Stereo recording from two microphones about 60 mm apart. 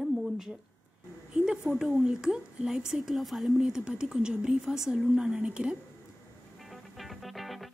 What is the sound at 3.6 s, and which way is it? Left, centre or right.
A woman's voice, centre.